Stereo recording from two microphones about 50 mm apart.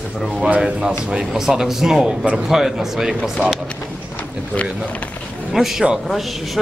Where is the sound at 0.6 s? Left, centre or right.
Right.